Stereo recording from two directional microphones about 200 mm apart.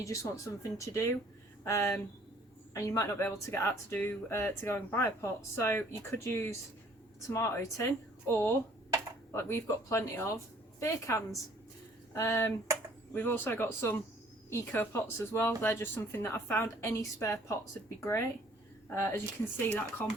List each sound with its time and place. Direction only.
0.0 s speech: 15° left (ahead or behind)